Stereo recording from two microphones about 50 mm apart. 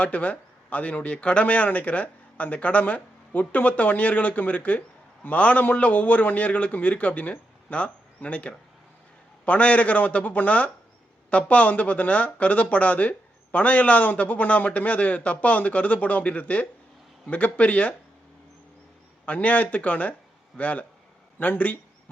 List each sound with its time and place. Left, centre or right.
0.0 s speech: left
19.2 s speech: left